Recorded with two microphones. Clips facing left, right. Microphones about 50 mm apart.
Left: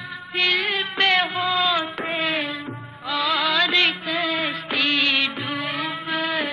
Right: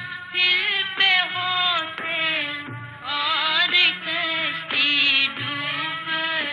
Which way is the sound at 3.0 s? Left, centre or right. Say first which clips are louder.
Left 2 dB; centre.